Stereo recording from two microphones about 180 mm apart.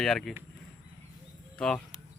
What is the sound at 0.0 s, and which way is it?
Speech, centre (ahead or behind).